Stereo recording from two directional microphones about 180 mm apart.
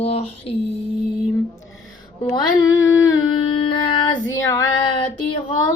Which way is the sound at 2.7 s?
20° left (ahead or behind).